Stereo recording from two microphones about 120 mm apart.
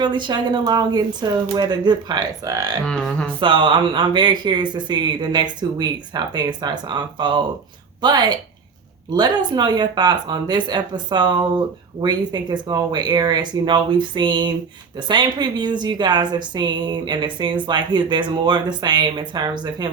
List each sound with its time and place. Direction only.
0.0 s speech: 40° right (ahead or behind)
2.8 s speech: 5° left (ahead or behind)
3.4 s speech: 45° right (ahead or behind)